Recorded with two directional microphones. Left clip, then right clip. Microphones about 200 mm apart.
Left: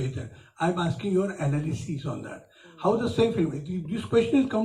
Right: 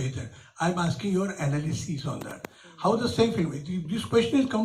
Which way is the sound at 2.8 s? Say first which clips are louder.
Even; 20° left (ahead or behind).